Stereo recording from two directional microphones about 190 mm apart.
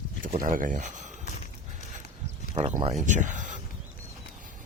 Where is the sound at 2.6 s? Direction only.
30° right (ahead or behind).